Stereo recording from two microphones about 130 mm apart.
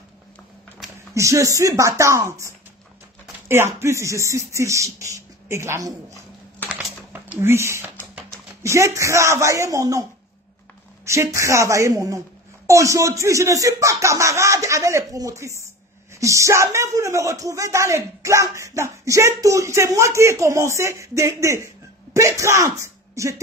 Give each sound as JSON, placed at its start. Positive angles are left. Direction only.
{"t": 1.1, "sound": "speech", "side_deg": -25}
{"t": 6.7, "sound": "a sound", "side_deg": -10}
{"t": 7.3, "sound": "speech", "side_deg": -20}
{"t": 11.1, "sound": "speech", "side_deg": -25}